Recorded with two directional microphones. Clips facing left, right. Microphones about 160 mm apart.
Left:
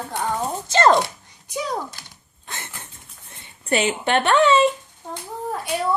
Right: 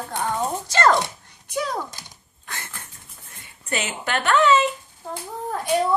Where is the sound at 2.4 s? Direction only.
20° left (ahead or behind).